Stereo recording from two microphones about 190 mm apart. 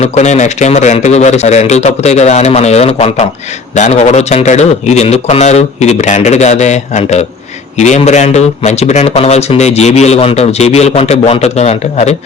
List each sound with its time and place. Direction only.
0.0 s a man's voice: 35° left (ahead or behind)